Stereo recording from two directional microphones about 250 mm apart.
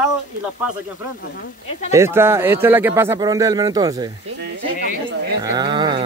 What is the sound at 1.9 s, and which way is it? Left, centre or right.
Speech, centre.